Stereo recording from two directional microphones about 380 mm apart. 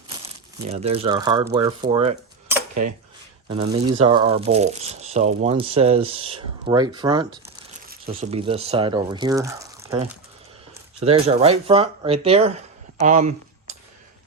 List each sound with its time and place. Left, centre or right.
0.7 s cutlery: centre
3.5 s speech: centre
7.4 s speech: right